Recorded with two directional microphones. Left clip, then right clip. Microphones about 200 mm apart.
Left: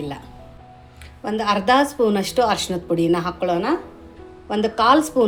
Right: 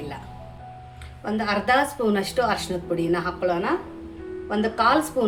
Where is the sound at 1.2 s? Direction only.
40° left (ahead or behind).